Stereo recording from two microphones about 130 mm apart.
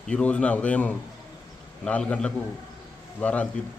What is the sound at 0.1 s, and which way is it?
A man's voice, 10° left (ahead or behind).